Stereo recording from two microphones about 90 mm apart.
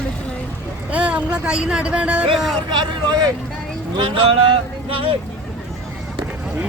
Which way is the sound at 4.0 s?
75° right (ahead or behind).